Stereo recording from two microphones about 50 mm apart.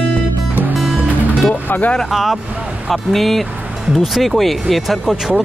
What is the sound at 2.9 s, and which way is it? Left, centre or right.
Speech, centre.